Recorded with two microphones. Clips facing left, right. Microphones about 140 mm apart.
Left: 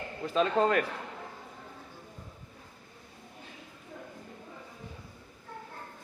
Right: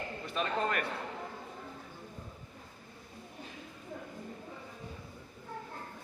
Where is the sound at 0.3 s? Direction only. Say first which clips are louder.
Left 7 dB; 90° left.